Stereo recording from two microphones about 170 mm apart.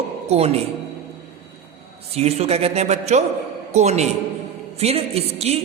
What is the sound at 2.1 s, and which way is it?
A man's voice, 40° right (ahead or behind).